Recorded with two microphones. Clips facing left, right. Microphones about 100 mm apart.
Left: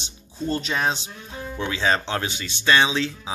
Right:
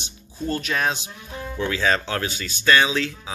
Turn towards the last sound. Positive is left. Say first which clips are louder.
# even
turn(degrees=25)  # may be behind; listen again after turning